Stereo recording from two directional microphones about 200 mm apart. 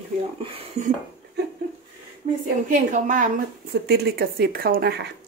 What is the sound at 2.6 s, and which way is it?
Speech, 40° right (ahead or behind).